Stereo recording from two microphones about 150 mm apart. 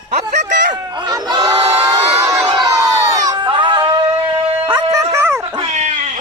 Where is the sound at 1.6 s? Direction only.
20° right (ahead or behind).